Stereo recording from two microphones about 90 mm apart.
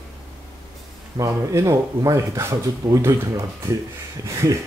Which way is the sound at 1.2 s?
35° right (ahead or behind).